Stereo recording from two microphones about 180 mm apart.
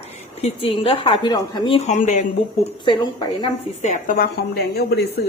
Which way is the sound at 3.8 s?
45° left (ahead or behind).